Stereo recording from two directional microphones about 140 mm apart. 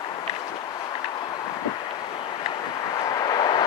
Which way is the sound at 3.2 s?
30° left (ahead or behind).